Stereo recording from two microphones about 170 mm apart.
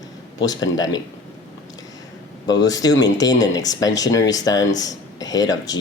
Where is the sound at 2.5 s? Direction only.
20° left (ahead or behind).